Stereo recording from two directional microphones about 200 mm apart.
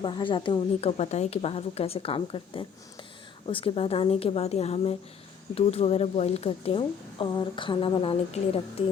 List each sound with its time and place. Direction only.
0.0 s a woman's voice: 25° left (ahead or behind)